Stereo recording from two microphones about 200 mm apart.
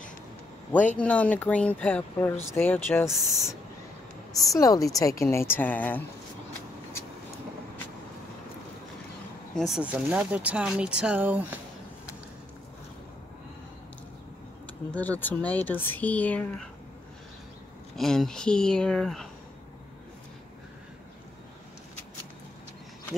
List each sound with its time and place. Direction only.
0.9 s speech: 5° left (ahead or behind)
3.1 s speech: centre (ahead or behind)
4.4 s speech: 15° left (ahead or behind)
9.6 s speech: 5° right (ahead or behind)
15.0 s speech: 10° left (ahead or behind)
17.9 s speech: centre (ahead or behind)